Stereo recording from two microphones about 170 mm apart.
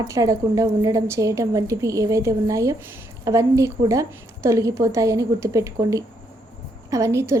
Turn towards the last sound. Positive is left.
turn(degrees=-15)  # may be behind; listen again after turning